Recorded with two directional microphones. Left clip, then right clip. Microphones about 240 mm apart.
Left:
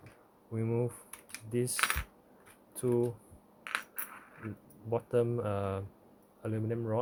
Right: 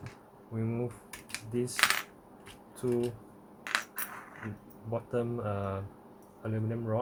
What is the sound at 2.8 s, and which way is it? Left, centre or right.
Speech, left.